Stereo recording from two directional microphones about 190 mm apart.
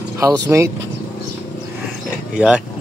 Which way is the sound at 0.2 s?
15° right (ahead or behind).